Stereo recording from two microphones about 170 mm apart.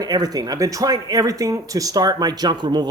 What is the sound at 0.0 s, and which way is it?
Speech, 20° right (ahead or behind).